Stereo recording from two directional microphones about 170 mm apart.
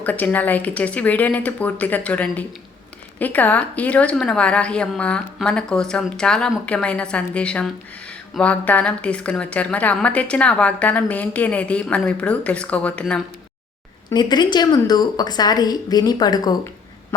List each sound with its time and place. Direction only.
0.0 s a woman's voice: 10° left (ahead or behind)
14.1 s a woman's voice: 25° left (ahead or behind)